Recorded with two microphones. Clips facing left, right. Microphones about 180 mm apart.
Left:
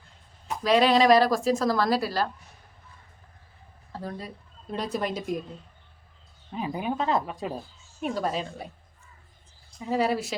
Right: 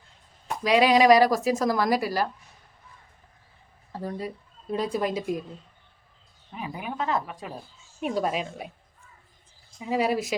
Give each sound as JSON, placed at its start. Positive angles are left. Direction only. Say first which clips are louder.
{"t": 0.6, "sound": "a woman's voice", "louder": "right 1 dB", "side_deg": -15}
{"t": 3.9, "sound": "a woman's voice", "louder": "right 4 dB", "side_deg": -15}
{"t": 6.5, "sound": "a woman's voice", "louder": "left 5 dB", "side_deg": 25}
{"t": 8.0, "sound": "a woman's voice", "louder": "right 2 dB", "side_deg": -10}
{"t": 9.8, "sound": "a woman's voice", "louder": "even", "side_deg": -10}